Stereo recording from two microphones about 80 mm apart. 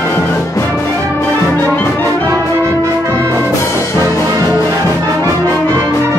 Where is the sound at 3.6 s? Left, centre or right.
Left.